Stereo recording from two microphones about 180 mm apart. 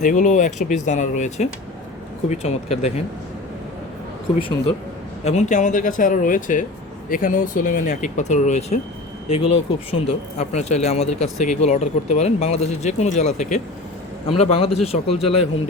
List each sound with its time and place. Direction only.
0.0 s speech: 45° left (ahead or behind)
4.4 s speech: 30° left (ahead or behind)
9.9 s speech: 35° left (ahead or behind)